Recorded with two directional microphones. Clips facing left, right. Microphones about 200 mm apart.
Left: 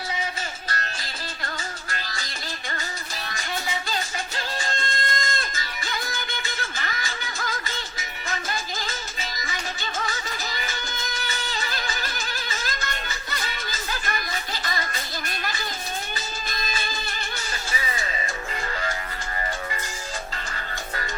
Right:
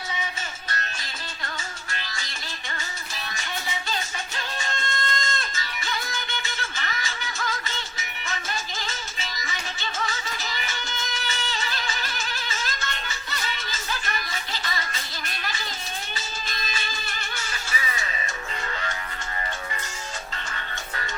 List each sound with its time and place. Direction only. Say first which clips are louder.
1.9 s music: left 2 dB; 40° left (ahead or behind)
4.4 s music: left 2 dB; 35° left (ahead or behind)
9.2 s music: left 2 dB; 35° left (ahead or behind)